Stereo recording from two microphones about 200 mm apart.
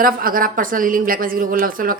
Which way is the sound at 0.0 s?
45° right (ahead or behind).